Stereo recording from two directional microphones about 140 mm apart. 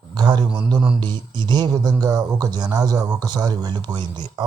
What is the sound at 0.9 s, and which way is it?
Speech, 30° right (ahead or behind).